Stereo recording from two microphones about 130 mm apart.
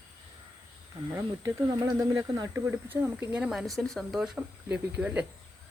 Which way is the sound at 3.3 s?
5° right (ahead or behind).